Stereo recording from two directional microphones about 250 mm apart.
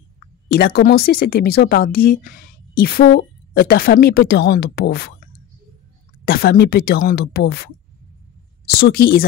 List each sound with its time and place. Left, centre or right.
0.5 s a woman's voice: left
6.2 s a woman's voice: left
8.8 s a woman's voice: left